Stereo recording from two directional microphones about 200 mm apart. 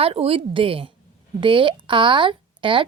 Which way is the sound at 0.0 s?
30° right (ahead or behind).